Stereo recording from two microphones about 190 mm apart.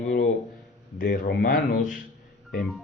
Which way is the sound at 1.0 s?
50° left (ahead or behind).